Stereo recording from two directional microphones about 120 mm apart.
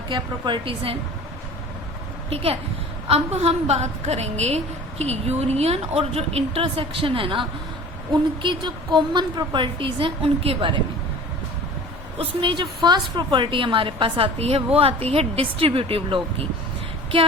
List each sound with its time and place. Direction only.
0.1 s a woman's voice: 45° right (ahead or behind)
2.3 s a woman's voice: 55° right (ahead or behind)
12.4 s a woman's voice: 45° right (ahead or behind)